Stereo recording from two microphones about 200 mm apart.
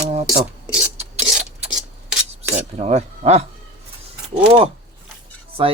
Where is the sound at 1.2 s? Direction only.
5° right (ahead or behind).